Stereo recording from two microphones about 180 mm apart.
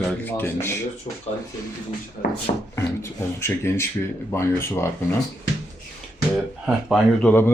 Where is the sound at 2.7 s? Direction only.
15° left (ahead or behind).